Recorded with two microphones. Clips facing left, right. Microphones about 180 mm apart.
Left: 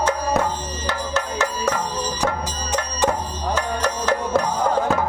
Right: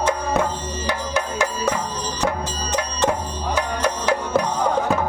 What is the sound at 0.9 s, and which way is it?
Music, 15° right (ahead or behind).